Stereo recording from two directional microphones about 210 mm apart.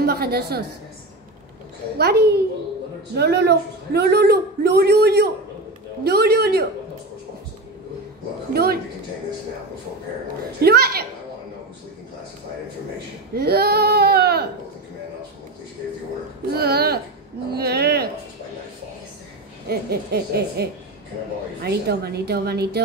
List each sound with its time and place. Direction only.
0.0 s a woman's voice: 50° right (ahead or behind)
2.0 s a man's voice: 50° right (ahead or behind)
10.6 s a man's voice: 50° right (ahead or behind)
13.3 s speech: 50° right (ahead or behind)
16.5 s a man's voice: 50° right (ahead or behind)
19.7 s a man's voice: 50° right (ahead or behind)
21.6 s a man's voice: 50° right (ahead or behind)